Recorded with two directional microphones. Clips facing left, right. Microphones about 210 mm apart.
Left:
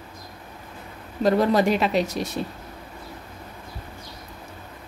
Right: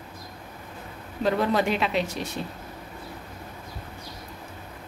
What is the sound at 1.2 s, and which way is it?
Speech, 40° left (ahead or behind).